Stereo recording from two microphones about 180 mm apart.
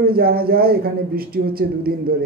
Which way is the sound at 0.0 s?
55° right (ahead or behind).